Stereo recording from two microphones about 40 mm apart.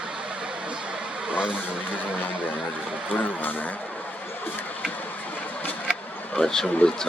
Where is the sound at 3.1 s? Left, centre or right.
Left.